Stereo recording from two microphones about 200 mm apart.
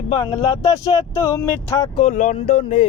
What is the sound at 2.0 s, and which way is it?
Speech, 35° left (ahead or behind).